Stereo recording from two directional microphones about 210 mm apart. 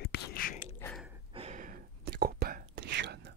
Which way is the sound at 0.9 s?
5° right (ahead or behind).